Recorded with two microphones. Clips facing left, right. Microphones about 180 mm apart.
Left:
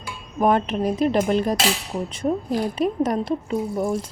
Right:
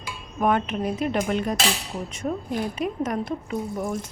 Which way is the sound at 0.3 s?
35° left (ahead or behind).